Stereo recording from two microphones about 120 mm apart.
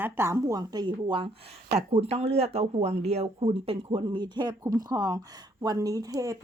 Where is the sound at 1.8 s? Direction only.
60° right (ahead or behind).